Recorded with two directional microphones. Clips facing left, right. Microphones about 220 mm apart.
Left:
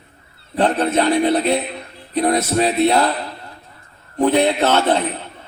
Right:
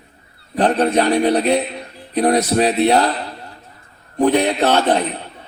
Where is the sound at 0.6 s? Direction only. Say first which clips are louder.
Right 1 dB; 35° right (ahead or behind).